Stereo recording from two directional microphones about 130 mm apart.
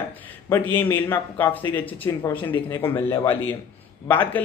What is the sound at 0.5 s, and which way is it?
Speech, 15° left (ahead or behind).